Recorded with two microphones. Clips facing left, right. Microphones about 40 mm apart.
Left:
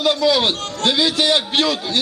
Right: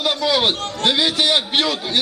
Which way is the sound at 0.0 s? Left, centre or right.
Centre.